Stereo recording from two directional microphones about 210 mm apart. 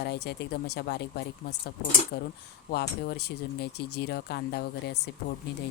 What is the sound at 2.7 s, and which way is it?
Speech, 50° left (ahead or behind).